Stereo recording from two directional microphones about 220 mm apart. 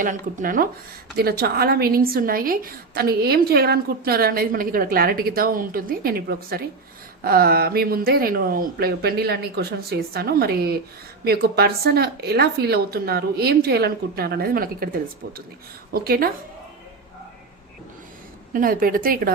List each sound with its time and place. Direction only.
0.0 s a woman's voice: 35° right (ahead or behind)
18.5 s a woman's voice: 40° right (ahead or behind)